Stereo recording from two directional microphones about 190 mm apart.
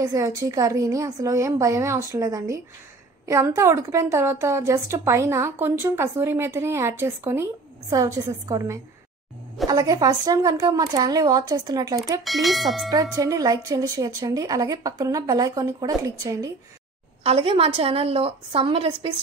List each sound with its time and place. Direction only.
0.0 s a woman's voice: 15° right (ahead or behind)
12.2 s speech: centre (ahead or behind)
12.9 s a woman's voice: 20° right (ahead or behind)
17.2 s a woman's voice: 30° right (ahead or behind)